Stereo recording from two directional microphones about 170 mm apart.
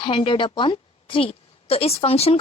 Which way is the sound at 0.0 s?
30° left (ahead or behind).